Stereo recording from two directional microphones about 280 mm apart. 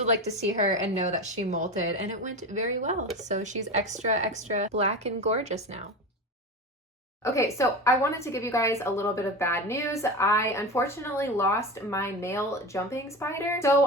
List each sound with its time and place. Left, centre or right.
0.8 s a woman's voice: right
7.3 s a woman's voice: centre